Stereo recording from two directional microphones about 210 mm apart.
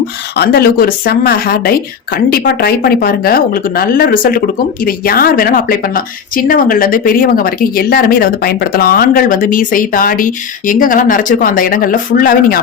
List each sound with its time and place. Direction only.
0.3 s a woman's voice: 45° left (ahead or behind)